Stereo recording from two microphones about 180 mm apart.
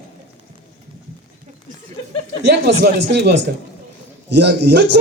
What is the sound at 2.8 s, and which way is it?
A man's voice, 70° right (ahead or behind).